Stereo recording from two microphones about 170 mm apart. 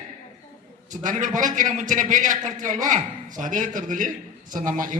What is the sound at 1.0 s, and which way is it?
A man's voice, 50° right (ahead or behind).